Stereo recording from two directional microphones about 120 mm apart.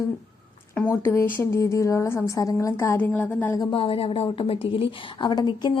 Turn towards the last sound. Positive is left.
turn(degrees=40)  # may be behind; listen again after turning